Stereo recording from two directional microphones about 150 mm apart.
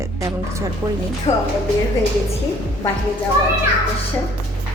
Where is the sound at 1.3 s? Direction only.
45° left (ahead or behind).